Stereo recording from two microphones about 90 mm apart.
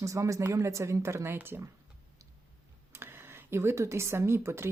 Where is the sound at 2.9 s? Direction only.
25° right (ahead or behind).